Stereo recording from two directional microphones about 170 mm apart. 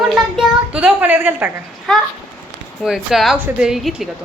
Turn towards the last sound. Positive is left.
turn(degrees=0)  # may be behind; listen again after turning